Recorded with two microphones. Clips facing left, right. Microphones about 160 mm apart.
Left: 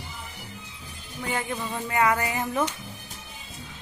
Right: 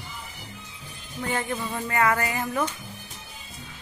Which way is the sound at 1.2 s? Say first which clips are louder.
Right 1 dB; 10° left (ahead or behind).